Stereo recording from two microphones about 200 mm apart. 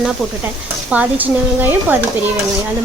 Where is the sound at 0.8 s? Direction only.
5° right (ahead or behind).